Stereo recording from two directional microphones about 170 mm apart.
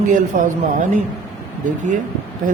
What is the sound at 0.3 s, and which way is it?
Speech, 50° right (ahead or behind).